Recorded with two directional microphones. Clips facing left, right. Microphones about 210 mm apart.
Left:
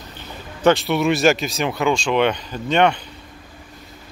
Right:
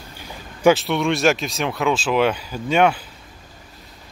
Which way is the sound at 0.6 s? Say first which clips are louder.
Right 1 dB; 10° right (ahead or behind).